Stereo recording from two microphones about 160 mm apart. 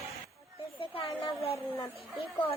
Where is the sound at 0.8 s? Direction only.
35° left (ahead or behind).